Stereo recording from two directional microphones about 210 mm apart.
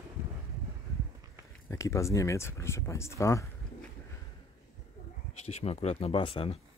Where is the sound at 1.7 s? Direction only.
15° left (ahead or behind).